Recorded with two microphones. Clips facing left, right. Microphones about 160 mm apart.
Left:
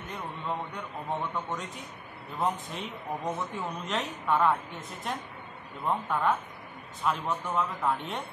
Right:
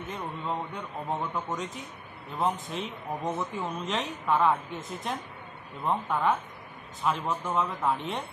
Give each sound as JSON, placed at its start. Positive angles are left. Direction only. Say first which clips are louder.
{"t": 1.1, "sound": "speech", "louder": "right 1 dB", "side_deg": 0}